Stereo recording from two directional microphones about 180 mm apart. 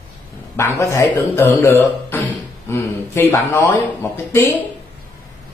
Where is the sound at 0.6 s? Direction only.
15° left (ahead or behind).